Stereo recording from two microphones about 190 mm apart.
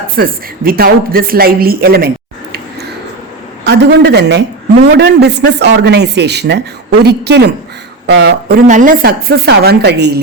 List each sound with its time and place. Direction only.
0.2 s speech: 50° right (ahead or behind)
3.6 s speech: 60° right (ahead or behind)
8.6 s speech: 45° right (ahead or behind); by 10.2 s 60° right (ahead or behind)